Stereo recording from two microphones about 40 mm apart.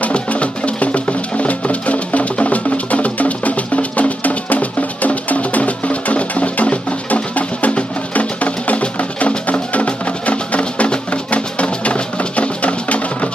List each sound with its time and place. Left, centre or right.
0.0 s music: left